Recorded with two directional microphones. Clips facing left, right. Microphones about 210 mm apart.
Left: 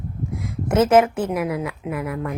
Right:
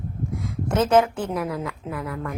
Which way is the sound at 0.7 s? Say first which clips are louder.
Left 3 dB; 20° left (ahead or behind).